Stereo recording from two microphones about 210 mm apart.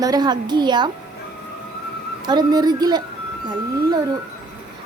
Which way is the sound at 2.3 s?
20° right (ahead or behind).